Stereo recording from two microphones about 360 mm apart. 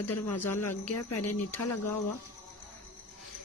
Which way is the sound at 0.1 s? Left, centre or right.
Left.